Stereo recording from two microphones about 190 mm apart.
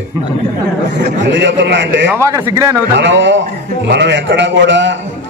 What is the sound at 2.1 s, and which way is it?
Speech, 15° right (ahead or behind).